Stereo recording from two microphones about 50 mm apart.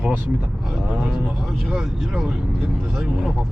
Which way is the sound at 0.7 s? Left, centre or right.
Centre.